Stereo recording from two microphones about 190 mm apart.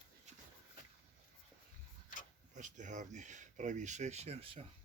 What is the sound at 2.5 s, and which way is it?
Speech, 40° right (ahead or behind).